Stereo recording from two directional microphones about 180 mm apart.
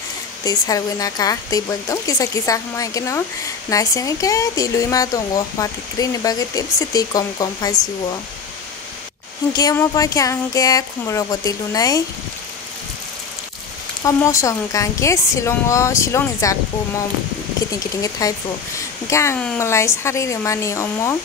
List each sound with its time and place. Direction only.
0.5 s speech: 20° left (ahead or behind)
9.5 s speech: 20° left (ahead or behind)
14.0 s a woman's voice: 15° left (ahead or behind)
18.2 s a woman's voice: 20° left (ahead or behind)